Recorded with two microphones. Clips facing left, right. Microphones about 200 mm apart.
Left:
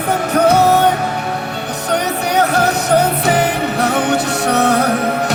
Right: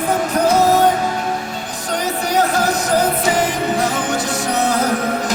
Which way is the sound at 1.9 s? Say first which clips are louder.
Left 2 dB; 65° left (ahead or behind).